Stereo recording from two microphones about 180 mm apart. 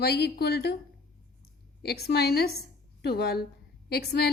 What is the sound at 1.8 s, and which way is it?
A woman's voice, 60° left (ahead or behind).